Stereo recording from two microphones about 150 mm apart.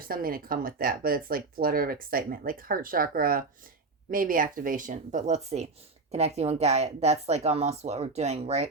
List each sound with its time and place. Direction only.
0.0 s speech: 75° right (ahead or behind); by 8.7 s 45° right (ahead or behind)